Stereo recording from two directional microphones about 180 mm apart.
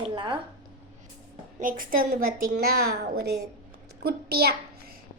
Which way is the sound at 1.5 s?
50° right (ahead or behind).